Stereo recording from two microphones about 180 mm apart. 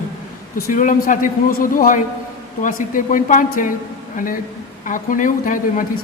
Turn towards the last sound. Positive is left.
turn(degrees=45)  # may be behind; listen again after turning